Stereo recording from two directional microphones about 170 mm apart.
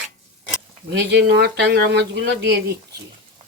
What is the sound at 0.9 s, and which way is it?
Speech, 90° right.